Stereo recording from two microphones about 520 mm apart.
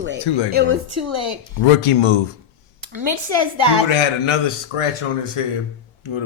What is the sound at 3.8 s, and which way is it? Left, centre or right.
Speech, left.